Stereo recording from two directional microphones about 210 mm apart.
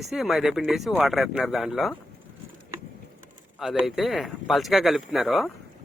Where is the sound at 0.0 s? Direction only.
Centre (ahead or behind).